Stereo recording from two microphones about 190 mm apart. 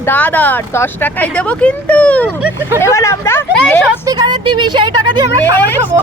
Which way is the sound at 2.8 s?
15° left (ahead or behind).